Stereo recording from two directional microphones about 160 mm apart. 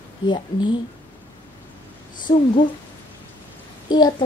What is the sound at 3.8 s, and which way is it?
Speech, 25° left (ahead or behind).